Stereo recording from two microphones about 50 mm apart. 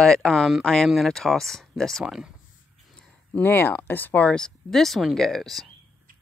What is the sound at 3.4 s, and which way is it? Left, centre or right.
Speech, left.